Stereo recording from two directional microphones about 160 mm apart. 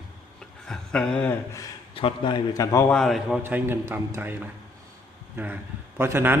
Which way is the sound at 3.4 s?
15° right (ahead or behind).